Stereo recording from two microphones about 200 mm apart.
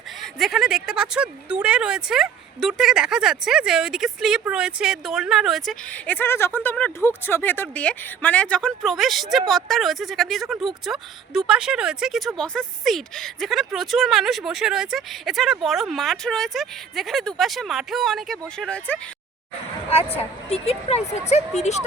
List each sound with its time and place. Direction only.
0.2 s a woman's voice: centre (ahead or behind)
20.1 s speech: 30° left (ahead or behind)